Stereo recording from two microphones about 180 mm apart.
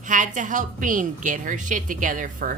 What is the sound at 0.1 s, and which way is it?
A woman's voice, 45° right (ahead or behind).